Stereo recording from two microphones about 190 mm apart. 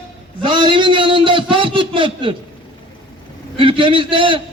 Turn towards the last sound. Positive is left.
turn(degrees=-25)  # may be behind; listen again after turning